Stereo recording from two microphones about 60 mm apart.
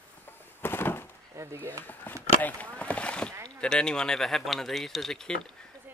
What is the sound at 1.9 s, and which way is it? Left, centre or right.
Speech, left.